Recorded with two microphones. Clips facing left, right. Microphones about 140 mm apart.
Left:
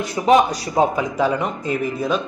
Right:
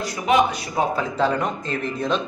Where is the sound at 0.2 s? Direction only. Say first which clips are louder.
Left 6 dB; 25° left (ahead or behind).